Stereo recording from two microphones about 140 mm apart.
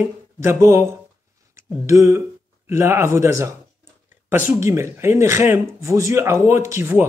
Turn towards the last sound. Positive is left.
turn(degrees=-15)  # may be behind; listen again after turning